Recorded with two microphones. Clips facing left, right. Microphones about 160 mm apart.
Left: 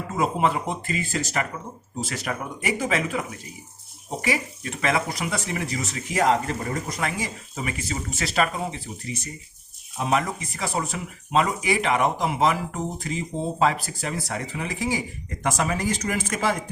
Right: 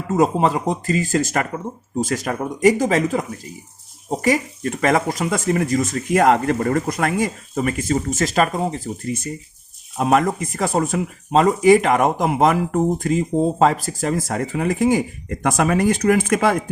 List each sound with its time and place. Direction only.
0.2 s speech: 40° right (ahead or behind); by 16.6 s 55° right (ahead or behind)